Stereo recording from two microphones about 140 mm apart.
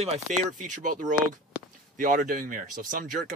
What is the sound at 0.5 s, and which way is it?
Speech, 65° right (ahead or behind).